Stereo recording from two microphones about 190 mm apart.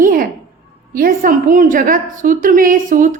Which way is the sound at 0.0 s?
50° right (ahead or behind).